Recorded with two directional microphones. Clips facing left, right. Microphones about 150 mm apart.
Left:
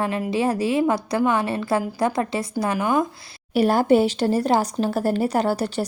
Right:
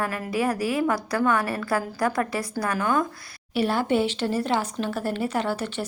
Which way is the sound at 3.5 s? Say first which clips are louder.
Left 6 dB; 40° left (ahead or behind).